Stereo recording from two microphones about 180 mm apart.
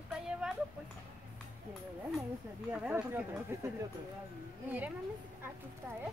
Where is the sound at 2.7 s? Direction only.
5° right (ahead or behind).